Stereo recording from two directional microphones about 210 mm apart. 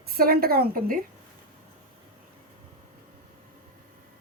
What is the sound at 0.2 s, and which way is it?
Speech, 45° right (ahead or behind).